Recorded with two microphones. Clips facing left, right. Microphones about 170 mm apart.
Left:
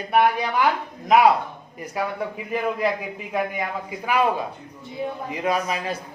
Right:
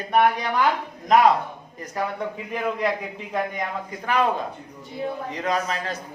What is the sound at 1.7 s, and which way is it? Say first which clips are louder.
Speech: left 1 dB; 10° left (ahead or behind).